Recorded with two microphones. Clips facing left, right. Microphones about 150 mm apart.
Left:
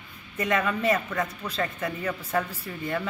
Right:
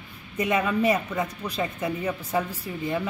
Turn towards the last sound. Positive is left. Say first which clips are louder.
# right 2 dB
turn(degrees=-15)  # may be behind; listen again after turning